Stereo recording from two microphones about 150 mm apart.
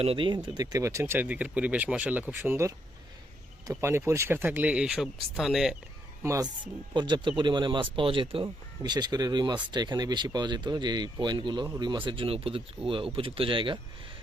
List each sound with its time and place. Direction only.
0.0 s speech: 35° right (ahead or behind)
0.4 s speech: 25° right (ahead or behind); by 5.7 s centre (ahead or behind)
6.2 s speech: 20° right (ahead or behind)
6.9 s speech: 30° right (ahead or behind)